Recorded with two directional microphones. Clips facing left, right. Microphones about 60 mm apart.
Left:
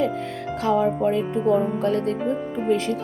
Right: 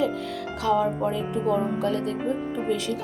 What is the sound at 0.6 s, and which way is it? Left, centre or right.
Speech, left.